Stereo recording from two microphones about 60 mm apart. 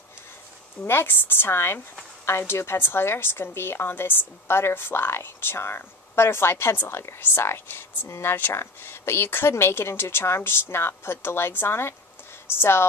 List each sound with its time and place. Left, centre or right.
0.8 s a woman's voice: left